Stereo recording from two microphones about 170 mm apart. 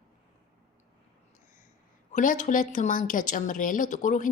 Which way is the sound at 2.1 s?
45° left (ahead or behind).